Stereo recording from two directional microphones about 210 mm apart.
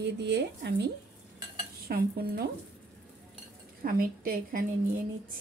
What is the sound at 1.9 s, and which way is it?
Speech, 45° right (ahead or behind).